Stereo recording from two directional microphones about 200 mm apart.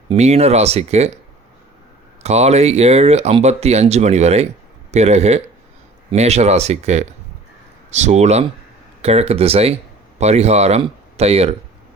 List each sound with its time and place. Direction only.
0.1 s speech: 30° right (ahead or behind)
2.2 s speech: 35° right (ahead or behind)